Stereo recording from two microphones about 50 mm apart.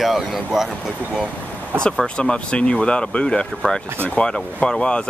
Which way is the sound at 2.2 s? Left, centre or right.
Centre.